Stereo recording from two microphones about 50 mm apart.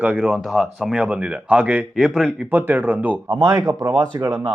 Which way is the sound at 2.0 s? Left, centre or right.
Centre.